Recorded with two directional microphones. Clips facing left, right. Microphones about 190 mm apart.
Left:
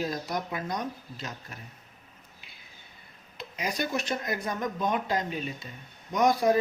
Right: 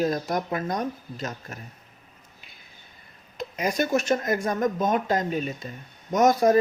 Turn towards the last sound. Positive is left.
turn(degrees=-45)  # may be behind; listen again after turning